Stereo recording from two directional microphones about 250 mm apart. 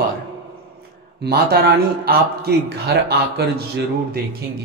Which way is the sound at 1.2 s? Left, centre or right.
Right.